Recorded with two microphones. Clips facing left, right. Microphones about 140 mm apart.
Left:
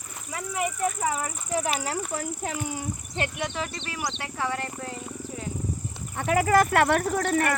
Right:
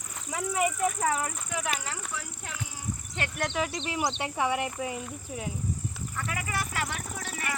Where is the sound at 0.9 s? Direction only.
10° left (ahead or behind).